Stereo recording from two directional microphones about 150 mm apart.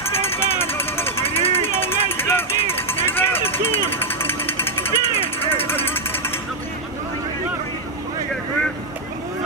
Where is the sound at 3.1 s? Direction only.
15° left (ahead or behind).